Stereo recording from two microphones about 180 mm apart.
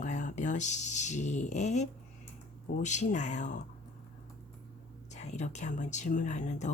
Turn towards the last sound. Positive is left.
turn(degrees=40)  # may be behind; listen again after turning